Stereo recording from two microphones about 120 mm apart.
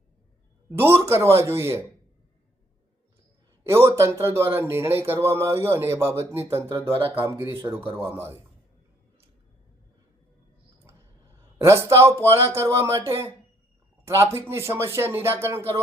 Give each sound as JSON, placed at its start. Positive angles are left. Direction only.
{"t": 0.7, "sound": "speech", "side_deg": -20}
{"t": 3.7, "sound": "speech", "side_deg": -25}
{"t": 11.5, "sound": "speech", "side_deg": -25}